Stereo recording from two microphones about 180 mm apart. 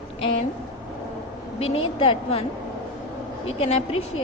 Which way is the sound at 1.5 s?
30° left (ahead or behind).